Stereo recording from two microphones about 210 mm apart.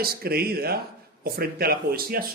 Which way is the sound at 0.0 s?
45° right (ahead or behind).